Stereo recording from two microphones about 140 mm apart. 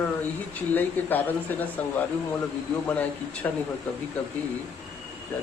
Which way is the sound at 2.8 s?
10° left (ahead or behind).